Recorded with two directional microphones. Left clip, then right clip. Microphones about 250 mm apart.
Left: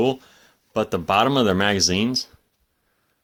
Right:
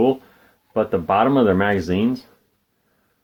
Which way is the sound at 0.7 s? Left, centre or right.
Left.